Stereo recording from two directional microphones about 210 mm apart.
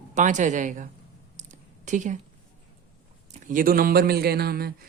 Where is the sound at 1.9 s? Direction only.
35° right (ahead or behind).